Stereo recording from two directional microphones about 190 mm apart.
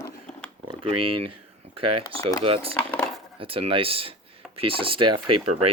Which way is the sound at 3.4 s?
30° right (ahead or behind).